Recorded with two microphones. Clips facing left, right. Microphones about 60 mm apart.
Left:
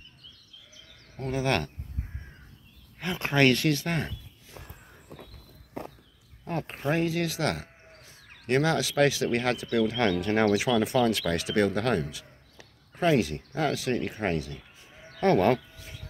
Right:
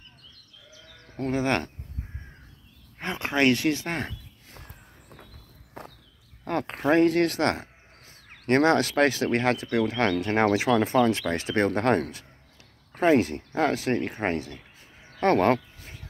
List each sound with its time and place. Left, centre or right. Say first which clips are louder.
1.1 s speech: right 2 dB; right
3.2 s speech: even; centre
6.4 s speech: right 5 dB; right
7.5 s bird: right 1 dB; right
8.5 s speech: right 5 dB; right
13.0 s speech: right 3 dB; right